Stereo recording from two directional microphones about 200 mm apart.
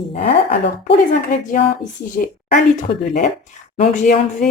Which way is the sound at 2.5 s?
35° left (ahead or behind).